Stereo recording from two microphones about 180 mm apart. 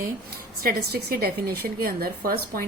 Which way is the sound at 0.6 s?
55° right (ahead or behind).